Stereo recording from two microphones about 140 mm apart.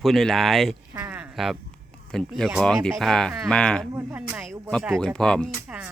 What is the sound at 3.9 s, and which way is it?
Speech, 15° right (ahead or behind).